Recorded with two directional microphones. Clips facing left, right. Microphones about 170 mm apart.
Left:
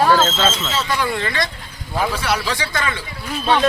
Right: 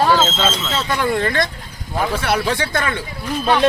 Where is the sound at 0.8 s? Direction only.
50° right (ahead or behind).